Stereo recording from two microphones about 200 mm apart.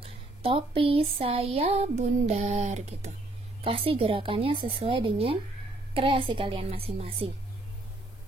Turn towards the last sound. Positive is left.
turn(degrees=-30)  # may be behind; listen again after turning